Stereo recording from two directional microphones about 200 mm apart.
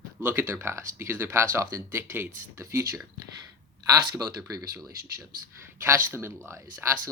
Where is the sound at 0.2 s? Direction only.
10° right (ahead or behind).